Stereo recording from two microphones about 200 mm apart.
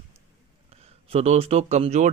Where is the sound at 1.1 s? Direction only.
30° right (ahead or behind).